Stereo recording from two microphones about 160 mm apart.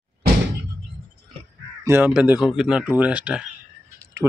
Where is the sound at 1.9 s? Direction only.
15° right (ahead or behind).